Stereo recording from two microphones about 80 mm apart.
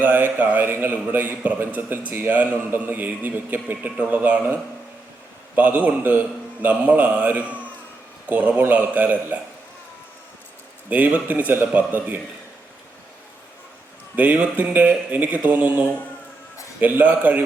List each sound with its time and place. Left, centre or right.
0.0 s a man's voice: right
5.5 s a man's voice: centre
10.8 s a man's voice: centre
14.2 s a man's voice: right